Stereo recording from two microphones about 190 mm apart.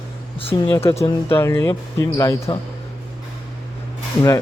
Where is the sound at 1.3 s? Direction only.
15° left (ahead or behind).